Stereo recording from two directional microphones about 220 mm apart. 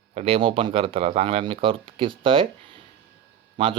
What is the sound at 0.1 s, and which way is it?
Speech, 25° right (ahead or behind).